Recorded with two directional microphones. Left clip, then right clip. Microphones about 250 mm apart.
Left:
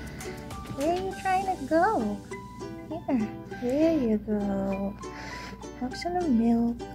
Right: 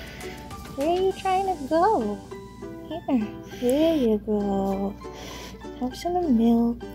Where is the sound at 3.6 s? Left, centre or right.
Right.